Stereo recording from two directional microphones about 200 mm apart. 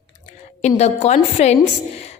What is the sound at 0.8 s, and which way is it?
Speech, 35° left (ahead or behind).